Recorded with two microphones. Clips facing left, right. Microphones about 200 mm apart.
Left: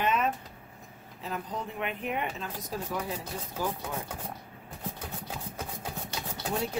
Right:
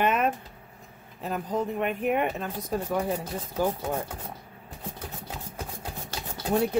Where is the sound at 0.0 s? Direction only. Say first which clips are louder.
Right 4 dB; 55° right (ahead or behind).